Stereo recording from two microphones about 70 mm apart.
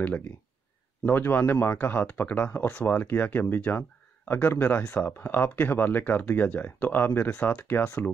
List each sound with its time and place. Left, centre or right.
0.0 s speech: left